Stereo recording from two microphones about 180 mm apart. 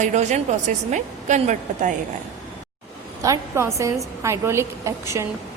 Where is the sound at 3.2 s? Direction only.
15° right (ahead or behind).